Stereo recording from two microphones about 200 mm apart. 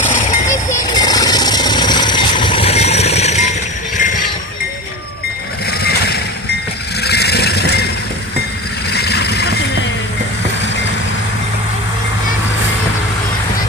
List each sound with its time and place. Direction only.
0.0 s vehicle: 40° left (ahead or behind)
0.4 s vehicle: 15° left (ahead or behind); by 3.5 s 35° left (ahead or behind)
7.0 s vehicle: 55° left (ahead or behind)
8.9 s vehicle: 55° left (ahead or behind)